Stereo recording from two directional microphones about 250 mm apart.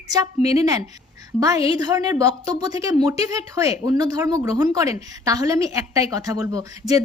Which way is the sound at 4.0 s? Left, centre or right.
Centre.